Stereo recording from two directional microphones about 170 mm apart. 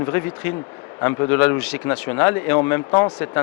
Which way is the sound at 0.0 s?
15° left (ahead or behind).